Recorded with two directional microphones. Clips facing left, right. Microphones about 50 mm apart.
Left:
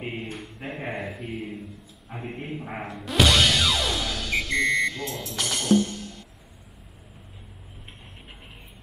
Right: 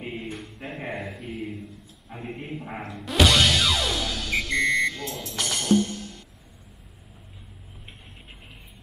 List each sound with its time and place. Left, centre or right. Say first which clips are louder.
0.2 s a sound: even; centre
2.0 s a man's voice: left 1 dB; centre
3.0 s music: even; centre